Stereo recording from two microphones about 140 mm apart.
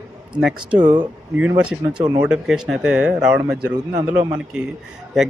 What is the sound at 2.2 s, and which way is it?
Speech, 5° right (ahead or behind).